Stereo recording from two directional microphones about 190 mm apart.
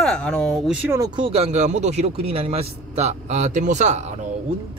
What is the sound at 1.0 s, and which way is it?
A man's voice, 25° right (ahead or behind).